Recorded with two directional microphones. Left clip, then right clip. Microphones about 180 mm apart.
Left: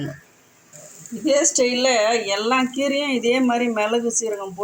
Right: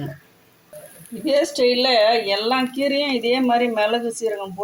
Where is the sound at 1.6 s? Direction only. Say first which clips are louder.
Right 2 dB; 40° left (ahead or behind).